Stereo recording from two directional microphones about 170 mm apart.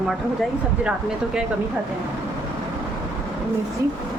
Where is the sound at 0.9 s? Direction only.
5° right (ahead or behind).